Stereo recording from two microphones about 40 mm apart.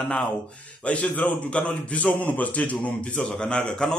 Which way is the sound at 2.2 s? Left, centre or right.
Left.